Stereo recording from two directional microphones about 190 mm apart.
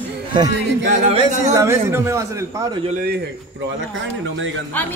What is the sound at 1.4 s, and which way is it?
A man's voice, 15° right (ahead or behind).